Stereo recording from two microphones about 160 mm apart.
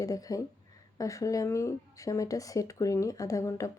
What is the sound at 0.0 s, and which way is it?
Speech, 20° left (ahead or behind).